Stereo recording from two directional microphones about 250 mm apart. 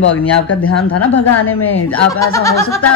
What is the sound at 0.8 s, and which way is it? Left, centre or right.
Speech, left.